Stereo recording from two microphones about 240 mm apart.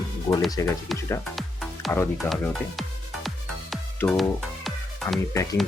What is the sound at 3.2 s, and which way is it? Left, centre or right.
Music, centre.